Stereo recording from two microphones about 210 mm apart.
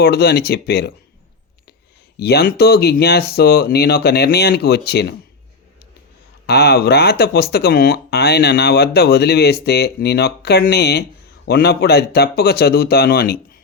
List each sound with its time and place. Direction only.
0.0 s speech: 50° left (ahead or behind)
2.1 s speech: 50° left (ahead or behind)
6.5 s speech: 50° left (ahead or behind)